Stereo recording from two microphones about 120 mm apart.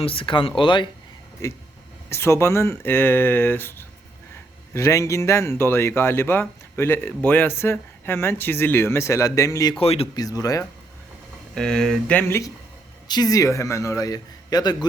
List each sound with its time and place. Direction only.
0.0 s speech: 50° left (ahead or behind)
2.0 s speech: 20° left (ahead or behind)
9.7 s speech: 55° left (ahead or behind)
10.2 s speech: 30° left (ahead or behind)
11.5 s speech: 5° left (ahead or behind)
13.1 s speech: 35° left (ahead or behind)